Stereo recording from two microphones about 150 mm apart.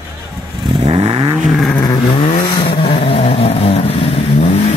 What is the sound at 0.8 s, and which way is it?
Vehicle, 45° right (ahead or behind).